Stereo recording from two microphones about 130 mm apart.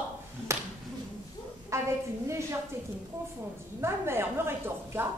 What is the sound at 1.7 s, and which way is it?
Speech, 20° right (ahead or behind).